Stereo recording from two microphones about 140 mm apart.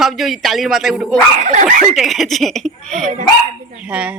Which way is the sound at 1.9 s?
Centre (ahead or behind).